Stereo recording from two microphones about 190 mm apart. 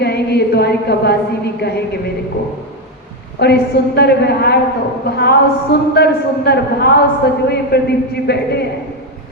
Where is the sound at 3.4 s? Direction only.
60° left (ahead or behind).